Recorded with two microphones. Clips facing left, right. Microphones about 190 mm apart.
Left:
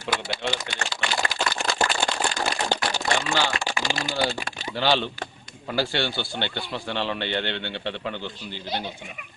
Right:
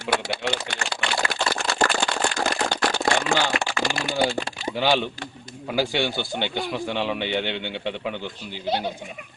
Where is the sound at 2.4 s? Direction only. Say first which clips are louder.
Right 2 dB; 75° right (ahead or behind).